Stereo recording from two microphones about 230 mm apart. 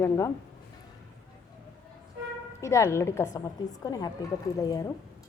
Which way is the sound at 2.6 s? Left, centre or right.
Centre.